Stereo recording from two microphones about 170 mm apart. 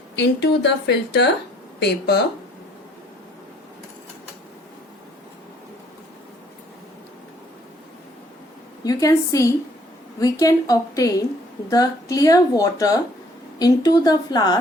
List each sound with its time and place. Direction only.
0.2 s speech: 85° left
8.8 s speech: 20° left (ahead or behind)